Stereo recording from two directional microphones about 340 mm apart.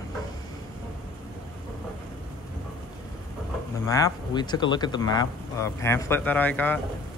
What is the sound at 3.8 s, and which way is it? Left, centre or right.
Speech, centre.